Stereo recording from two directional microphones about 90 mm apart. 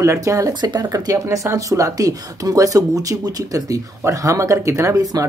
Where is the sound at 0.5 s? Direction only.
50° right (ahead or behind).